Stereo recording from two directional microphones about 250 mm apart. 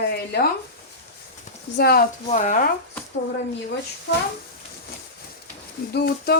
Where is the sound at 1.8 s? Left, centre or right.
Left.